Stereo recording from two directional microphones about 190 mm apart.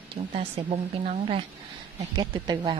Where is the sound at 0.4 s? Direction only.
30° right (ahead or behind).